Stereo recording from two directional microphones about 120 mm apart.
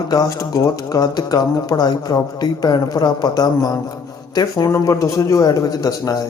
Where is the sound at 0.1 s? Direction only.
30° left (ahead or behind).